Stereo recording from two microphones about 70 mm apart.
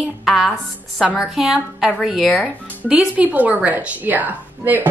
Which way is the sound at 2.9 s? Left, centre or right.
Centre.